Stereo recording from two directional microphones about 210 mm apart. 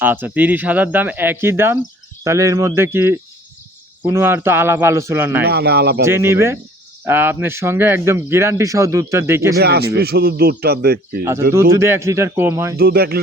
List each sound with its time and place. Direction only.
0.0 s speech: 10° right (ahead or behind)
5.5 s speech: 50° right (ahead or behind)
6.1 s speech: 10° right (ahead or behind)
9.6 s speech: 50° right (ahead or behind)
11.7 s speech: 15° right (ahead or behind)
12.7 s speech: 50° right (ahead or behind)